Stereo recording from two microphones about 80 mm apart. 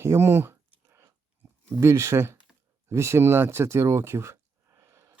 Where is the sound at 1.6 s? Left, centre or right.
Right.